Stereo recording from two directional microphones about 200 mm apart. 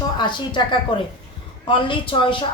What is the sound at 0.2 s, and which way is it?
A woman's voice, 20° left (ahead or behind).